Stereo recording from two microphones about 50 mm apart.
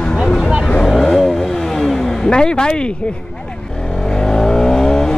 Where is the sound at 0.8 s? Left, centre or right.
Centre.